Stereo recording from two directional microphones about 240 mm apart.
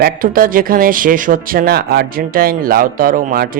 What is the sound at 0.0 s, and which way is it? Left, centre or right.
Speech, right.